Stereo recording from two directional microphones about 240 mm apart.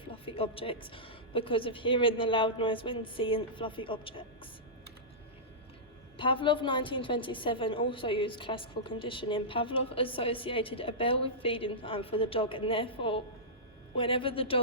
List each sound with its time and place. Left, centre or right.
0.1 s a woman's voice: left
6.1 s a woman's voice: left